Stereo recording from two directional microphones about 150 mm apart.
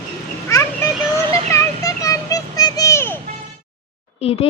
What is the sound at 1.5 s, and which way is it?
Children playing, 20° left (ahead or behind).